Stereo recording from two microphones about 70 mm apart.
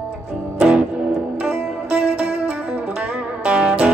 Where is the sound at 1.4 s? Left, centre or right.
Right.